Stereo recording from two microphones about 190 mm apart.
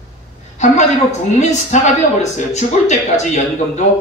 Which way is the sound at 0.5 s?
40° left (ahead or behind).